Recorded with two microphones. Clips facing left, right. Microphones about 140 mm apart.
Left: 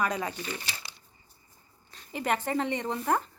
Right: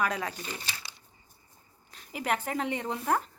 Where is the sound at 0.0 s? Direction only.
Centre (ahead or behind).